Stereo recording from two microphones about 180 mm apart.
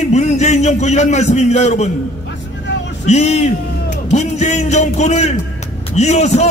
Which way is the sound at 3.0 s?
40° left (ahead or behind).